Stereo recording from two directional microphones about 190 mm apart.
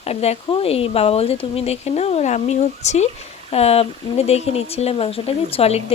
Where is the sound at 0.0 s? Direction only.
35° left (ahead or behind).